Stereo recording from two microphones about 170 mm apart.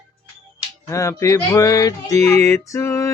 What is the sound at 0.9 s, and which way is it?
Music, 15° left (ahead or behind).